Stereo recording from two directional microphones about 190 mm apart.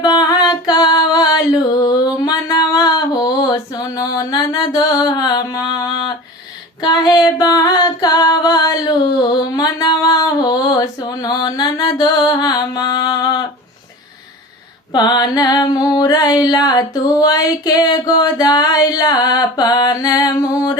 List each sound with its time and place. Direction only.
0.0 s music: 20° left (ahead or behind)
2.1 s a sound: 15° left (ahead or behind)
6.8 s singing: 20° left (ahead or behind)
14.9 s music: 20° left (ahead or behind)